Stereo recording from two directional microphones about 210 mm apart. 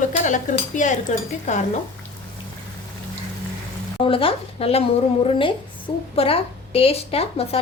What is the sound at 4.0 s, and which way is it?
Speech, 25° left (ahead or behind).